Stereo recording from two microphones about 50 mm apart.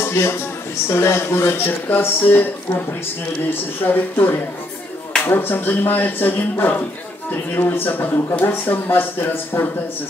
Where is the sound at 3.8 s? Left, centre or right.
Left.